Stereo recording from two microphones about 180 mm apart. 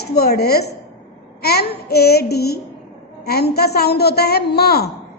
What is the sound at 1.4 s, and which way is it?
Child singing, 60° left (ahead or behind).